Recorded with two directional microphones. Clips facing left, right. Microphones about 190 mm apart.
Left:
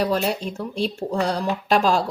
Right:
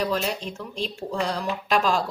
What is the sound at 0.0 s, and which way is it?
Speech, 40° left (ahead or behind).